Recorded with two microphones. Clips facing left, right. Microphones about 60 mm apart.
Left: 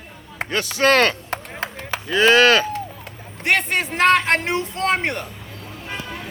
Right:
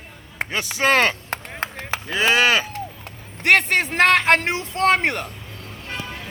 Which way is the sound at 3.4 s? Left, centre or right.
Right.